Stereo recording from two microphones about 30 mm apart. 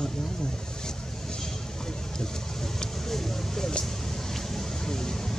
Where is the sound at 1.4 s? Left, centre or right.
Centre.